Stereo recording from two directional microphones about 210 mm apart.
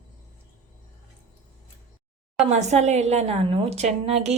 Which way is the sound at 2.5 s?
35° right (ahead or behind).